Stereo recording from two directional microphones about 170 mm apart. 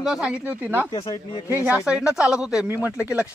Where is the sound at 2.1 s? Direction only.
5° right (ahead or behind).